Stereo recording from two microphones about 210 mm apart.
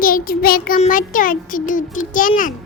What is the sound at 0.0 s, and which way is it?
Child singing, 45° left (ahead or behind).